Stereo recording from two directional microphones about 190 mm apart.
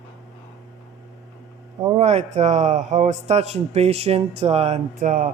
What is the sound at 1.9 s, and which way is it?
Speech, 35° right (ahead or behind).